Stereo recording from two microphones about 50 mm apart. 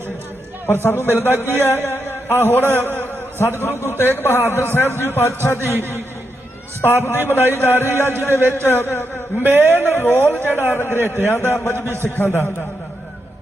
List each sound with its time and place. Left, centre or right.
0.7 s a man's voice: left
5.2 s a man's voice: left
8.6 s a man's voice: left
9.4 s a man's voice: right
9.8 s a man's voice: left